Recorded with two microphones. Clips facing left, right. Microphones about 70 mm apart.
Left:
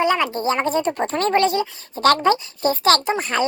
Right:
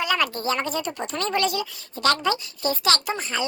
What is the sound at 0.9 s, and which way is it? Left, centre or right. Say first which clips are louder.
A woman's voice: left 7 dB; left.